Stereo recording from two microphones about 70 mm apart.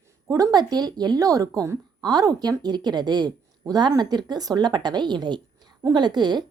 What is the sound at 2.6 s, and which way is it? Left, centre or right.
A woman's voice, right.